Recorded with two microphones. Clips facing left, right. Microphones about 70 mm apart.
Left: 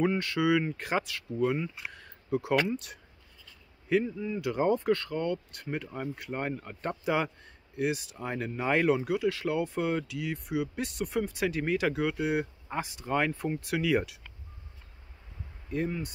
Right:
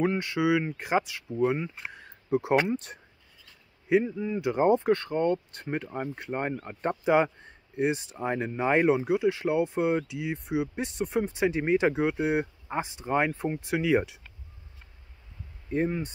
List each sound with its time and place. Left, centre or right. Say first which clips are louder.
0.0 s speech: right 1 dB; centre
2.7 s speech: right 4 dB; right
3.9 s speech: right 3 dB; centre
15.7 s speech: right 4 dB; right